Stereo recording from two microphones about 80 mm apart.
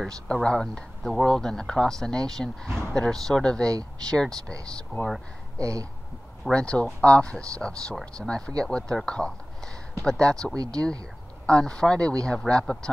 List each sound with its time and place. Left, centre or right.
0.0 s speech: centre
5.6 s speech: right
6.4 s speech: centre
10.5 s speech: right
11.4 s speech: centre